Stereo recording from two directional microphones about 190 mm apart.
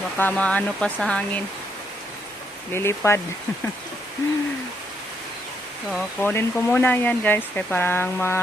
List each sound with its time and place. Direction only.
0.2 s speech: 10° left (ahead or behind)
2.7 s speech: 15° left (ahead or behind)
5.9 s speech: 5° left (ahead or behind)